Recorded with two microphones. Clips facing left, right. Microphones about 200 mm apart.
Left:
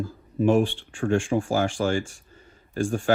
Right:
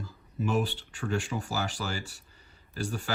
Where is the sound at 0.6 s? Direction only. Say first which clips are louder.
Left 7 dB; 40° right (ahead or behind).